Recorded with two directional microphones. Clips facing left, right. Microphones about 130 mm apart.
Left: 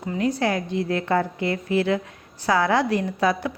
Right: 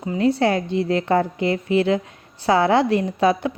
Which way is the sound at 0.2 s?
30° right (ahead or behind).